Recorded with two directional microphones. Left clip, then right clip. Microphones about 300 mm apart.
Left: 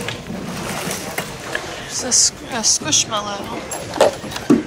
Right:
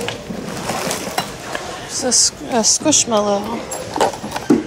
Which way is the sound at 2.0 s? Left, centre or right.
Centre.